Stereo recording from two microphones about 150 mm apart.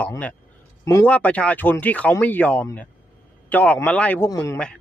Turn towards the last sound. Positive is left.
turn(degrees=5)  # may be behind; listen again after turning